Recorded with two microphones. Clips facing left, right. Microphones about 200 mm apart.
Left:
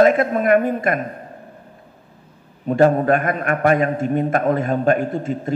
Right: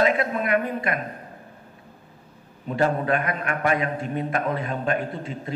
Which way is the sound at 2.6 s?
45° left (ahead or behind).